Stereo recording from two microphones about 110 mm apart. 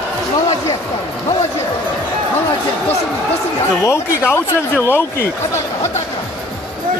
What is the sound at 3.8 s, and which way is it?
Speech, 25° left (ahead or behind).